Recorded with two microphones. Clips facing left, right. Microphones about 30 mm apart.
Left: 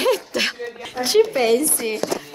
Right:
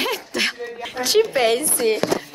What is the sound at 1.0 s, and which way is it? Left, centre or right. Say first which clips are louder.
Speech: left 1 dB; right.